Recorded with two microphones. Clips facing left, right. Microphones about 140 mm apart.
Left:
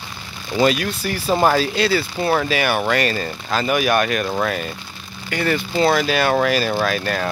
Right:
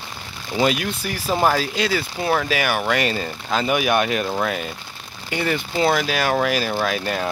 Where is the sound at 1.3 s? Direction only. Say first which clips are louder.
Left 2 dB; 5° left (ahead or behind).